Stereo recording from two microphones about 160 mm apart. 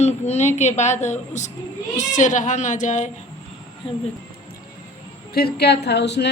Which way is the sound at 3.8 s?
30° left (ahead or behind).